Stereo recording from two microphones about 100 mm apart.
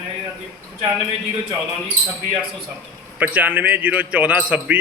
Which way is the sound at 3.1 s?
15° right (ahead or behind).